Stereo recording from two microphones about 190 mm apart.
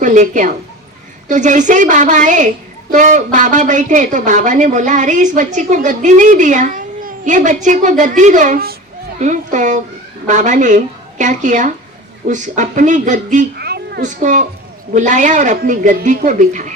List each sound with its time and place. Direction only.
0.0 s speech: 40° right (ahead or behind)
13.6 s a sound: 55° right (ahead or behind)
14.0 s speech: 40° right (ahead or behind)